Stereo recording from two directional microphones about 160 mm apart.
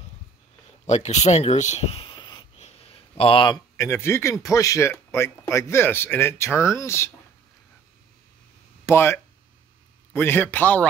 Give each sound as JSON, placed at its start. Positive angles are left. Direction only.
{"t": 0.8, "sound": "speech", "side_deg": 45}
{"t": 2.5, "sound": "speech", "side_deg": 40}
{"t": 8.8, "sound": "a man's voice", "side_deg": 15}